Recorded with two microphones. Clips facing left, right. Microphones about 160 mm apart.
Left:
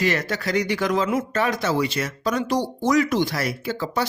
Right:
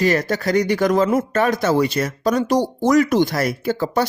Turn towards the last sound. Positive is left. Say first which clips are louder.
# right 6 dB
turn(degrees=-45)  # may be behind; listen again after turning